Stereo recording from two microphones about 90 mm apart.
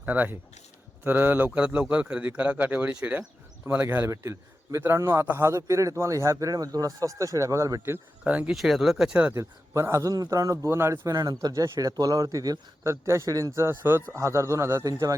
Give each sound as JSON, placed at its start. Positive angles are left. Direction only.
{"t": 0.0, "sound": "a man's voice", "side_deg": -20}
{"t": 8.2, "sound": "a man's voice", "side_deg": -15}
{"t": 8.5, "sound": "speech", "side_deg": 0}
{"t": 9.3, "sound": "a man's voice", "side_deg": -30}
{"t": 13.7, "sound": "a man's voice", "side_deg": -25}